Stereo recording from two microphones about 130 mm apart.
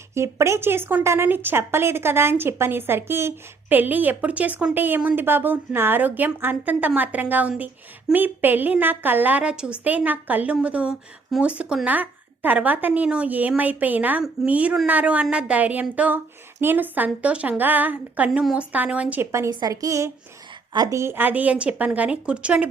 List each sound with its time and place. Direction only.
0.1 s a woman's voice: 20° right (ahead or behind)